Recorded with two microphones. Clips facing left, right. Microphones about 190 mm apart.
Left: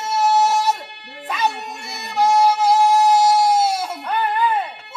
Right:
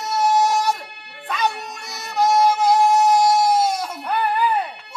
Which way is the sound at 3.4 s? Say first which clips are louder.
Left 1 dB; 5° left (ahead or behind).